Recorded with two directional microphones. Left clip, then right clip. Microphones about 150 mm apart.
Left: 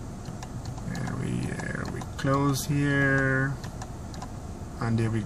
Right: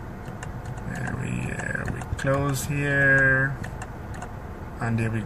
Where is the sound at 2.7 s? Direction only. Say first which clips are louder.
Right 7 dB; 25° left (ahead or behind).